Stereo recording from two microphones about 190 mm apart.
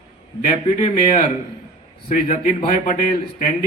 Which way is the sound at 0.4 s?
45° left (ahead or behind).